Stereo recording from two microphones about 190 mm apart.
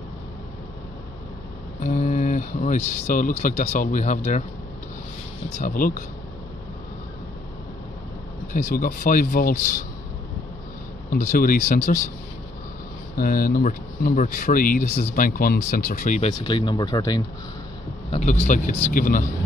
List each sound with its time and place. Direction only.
1.8 s speech: 45° left (ahead or behind)
5.6 s speech: 45° left (ahead or behind)
8.5 s speech: 40° left (ahead or behind)
11.1 s speech: 45° left (ahead or behind)
13.1 s speech: 50° left (ahead or behind)
16.3 s speech: 25° left (ahead or behind)
18.1 s speech: 35° left (ahead or behind)